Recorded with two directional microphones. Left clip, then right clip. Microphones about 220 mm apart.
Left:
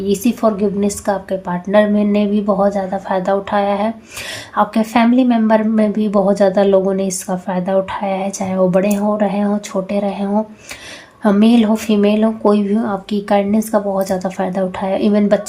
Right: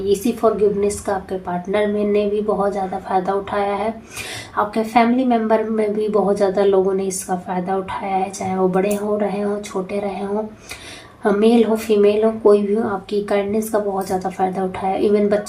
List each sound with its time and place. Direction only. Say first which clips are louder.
0.1 s a woman's voice: left 1 dB; 50° left (ahead or behind)
11.2 s a woman's voice: left 1 dB; 50° left (ahead or behind)